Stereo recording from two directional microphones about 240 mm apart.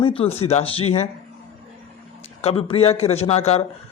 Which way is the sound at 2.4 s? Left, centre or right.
Left.